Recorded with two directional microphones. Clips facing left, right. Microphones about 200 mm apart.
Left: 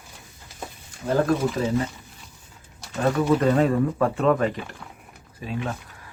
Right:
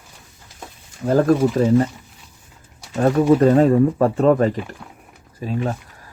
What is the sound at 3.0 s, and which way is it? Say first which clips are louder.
Speech: right 6 dB; 40° right (ahead or behind).